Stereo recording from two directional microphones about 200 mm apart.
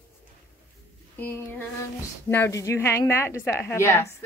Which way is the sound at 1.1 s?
10° left (ahead or behind).